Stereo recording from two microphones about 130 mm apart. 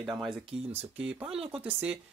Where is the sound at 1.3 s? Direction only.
45° right (ahead or behind).